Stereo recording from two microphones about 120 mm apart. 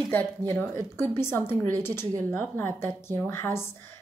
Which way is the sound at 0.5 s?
20° left (ahead or behind).